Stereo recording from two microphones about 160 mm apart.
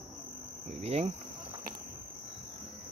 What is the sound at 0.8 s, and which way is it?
Cricket, 40° right (ahead or behind).